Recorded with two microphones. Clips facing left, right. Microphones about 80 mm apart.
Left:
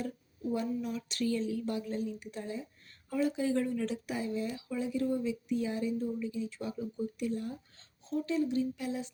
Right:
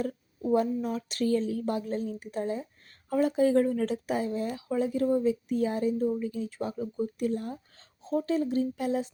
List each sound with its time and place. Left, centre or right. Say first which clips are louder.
0.0 s speech: right 6 dB; right